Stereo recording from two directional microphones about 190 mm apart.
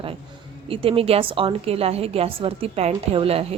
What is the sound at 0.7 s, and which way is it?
A woman's voice, 30° right (ahead or behind).